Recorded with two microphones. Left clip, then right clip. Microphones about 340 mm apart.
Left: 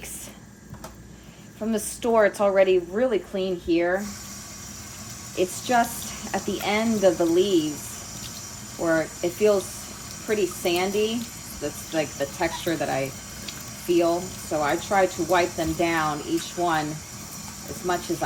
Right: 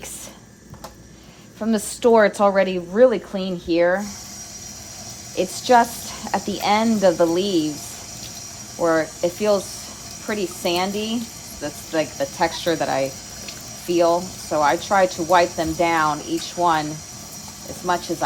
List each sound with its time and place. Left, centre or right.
1.7 s speech: right
5.4 s speech: right
8.8 s speech: right